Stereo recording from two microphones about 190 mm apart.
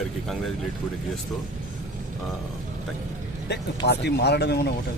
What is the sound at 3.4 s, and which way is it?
Speech, 60° left (ahead or behind).